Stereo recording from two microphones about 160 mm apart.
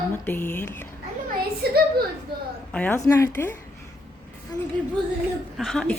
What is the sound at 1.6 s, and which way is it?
Speech, 80° right.